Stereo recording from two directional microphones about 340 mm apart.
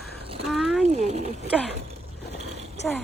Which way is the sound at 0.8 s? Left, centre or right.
Centre.